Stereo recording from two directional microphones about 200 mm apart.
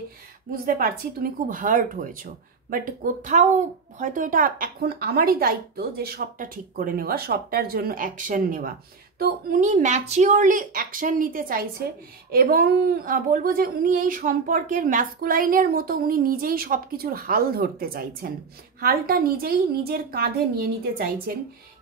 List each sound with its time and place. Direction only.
0.5 s speech: 45° right (ahead or behind)